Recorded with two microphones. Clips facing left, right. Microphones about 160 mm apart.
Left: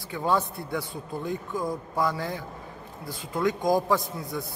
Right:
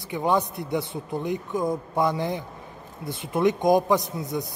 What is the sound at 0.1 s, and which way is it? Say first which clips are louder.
A man's voice: right 3 dB; 15° right (ahead or behind).